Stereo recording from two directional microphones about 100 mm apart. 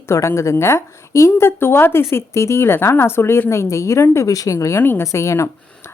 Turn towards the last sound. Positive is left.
turn(degrees=30)  # may be behind; listen again after turning